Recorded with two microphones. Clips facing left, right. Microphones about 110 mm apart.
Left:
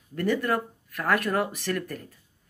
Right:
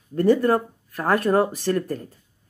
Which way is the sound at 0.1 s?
30° right (ahead or behind).